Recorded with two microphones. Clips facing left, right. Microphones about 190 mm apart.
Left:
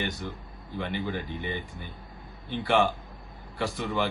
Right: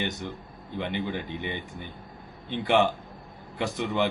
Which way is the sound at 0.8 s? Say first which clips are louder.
Right 1 dB; 20° right (ahead or behind).